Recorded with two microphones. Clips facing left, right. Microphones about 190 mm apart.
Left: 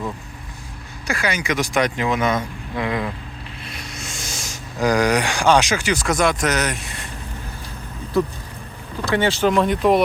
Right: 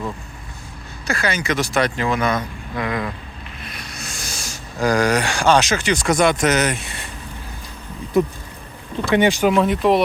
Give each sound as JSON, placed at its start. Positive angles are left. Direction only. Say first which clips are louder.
{"t": 1.0, "sound": "speech", "louder": "right 1 dB", "side_deg": 15}
{"t": 9.0, "sound": "speech", "louder": "right 2 dB", "side_deg": -15}